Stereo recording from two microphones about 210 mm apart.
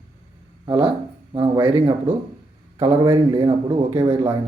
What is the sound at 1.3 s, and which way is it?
Speech, 25° right (ahead or behind).